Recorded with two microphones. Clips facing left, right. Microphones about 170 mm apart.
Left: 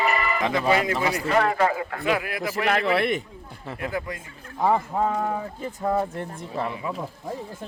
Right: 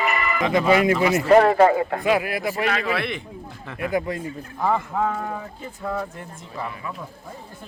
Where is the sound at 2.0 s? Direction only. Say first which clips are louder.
Even; 20° right (ahead or behind).